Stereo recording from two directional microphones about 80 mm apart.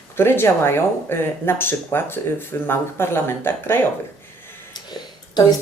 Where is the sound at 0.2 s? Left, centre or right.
Left.